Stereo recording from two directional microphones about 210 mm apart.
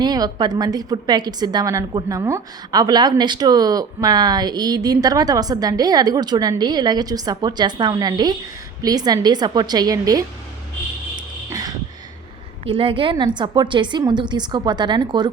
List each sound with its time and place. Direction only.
0.0 s a woman's voice: 20° right (ahead or behind)
11.4 s a sound: 15° right (ahead or behind)
12.6 s a woman's voice: 25° right (ahead or behind)